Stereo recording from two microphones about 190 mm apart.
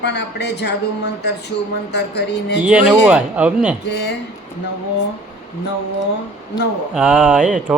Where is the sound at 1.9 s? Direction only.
60° left (ahead or behind).